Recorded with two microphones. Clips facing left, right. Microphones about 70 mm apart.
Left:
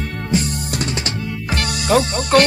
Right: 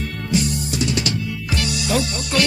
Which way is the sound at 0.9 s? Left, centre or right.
Left.